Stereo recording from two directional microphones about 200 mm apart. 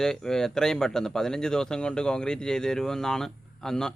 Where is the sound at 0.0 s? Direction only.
Centre (ahead or behind).